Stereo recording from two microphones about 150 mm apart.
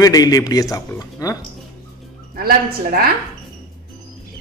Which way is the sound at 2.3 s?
80° right.